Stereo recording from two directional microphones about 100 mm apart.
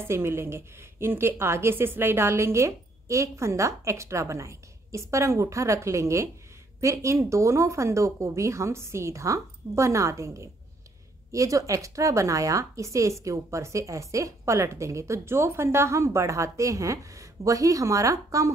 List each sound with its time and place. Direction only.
0.0 s a woman's voice: 25° right (ahead or behind)